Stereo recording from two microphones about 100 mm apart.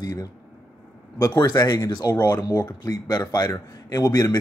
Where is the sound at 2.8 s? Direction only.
40° left (ahead or behind).